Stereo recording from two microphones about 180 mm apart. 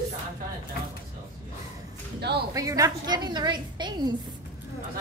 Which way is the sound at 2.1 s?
65° right (ahead or behind).